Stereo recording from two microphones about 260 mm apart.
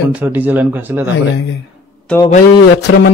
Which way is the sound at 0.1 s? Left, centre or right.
Centre.